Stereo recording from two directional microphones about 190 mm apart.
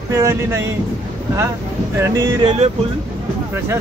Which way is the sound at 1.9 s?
15° right (ahead or behind).